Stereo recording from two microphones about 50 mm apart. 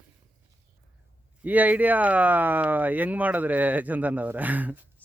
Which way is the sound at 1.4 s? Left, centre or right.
Right.